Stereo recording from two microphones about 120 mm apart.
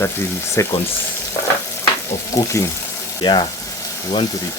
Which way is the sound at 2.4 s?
25° left (ahead or behind).